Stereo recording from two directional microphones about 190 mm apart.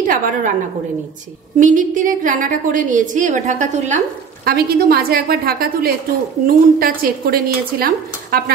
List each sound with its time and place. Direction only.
0.0 s a woman's voice: 45° right (ahead or behind)
1.6 s a woman's voice: 45° right (ahead or behind)
4.5 s a woman's voice: 55° right (ahead or behind)